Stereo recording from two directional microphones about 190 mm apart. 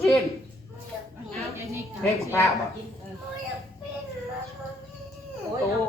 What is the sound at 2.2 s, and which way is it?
Speech, 15° left (ahead or behind).